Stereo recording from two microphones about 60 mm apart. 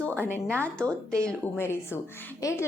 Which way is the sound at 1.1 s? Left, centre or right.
Centre.